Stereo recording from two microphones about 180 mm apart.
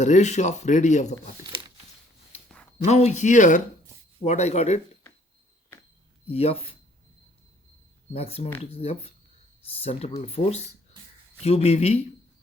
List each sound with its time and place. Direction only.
0.0 s speech: 40° left (ahead or behind)
2.3 s a sound: 30° left (ahead or behind)
2.8 s speech: 40° left (ahead or behind)
6.2 s speech: 35° left (ahead or behind)
8.1 s speech: 35° left (ahead or behind)